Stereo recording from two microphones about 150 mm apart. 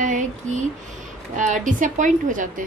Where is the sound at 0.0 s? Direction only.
55° right (ahead or behind).